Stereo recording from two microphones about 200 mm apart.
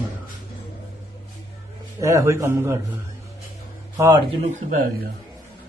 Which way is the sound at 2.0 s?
15° right (ahead or behind).